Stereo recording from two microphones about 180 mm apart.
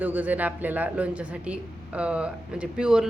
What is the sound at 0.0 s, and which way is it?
Speech, 10° right (ahead or behind).